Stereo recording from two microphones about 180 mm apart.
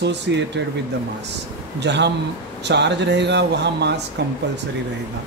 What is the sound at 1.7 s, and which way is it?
Speech, 75° right (ahead or behind).